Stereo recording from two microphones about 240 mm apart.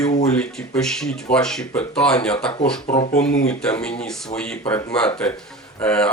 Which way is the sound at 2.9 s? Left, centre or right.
Left.